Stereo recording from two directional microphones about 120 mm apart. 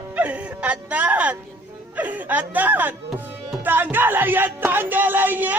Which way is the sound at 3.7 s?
15° right (ahead or behind).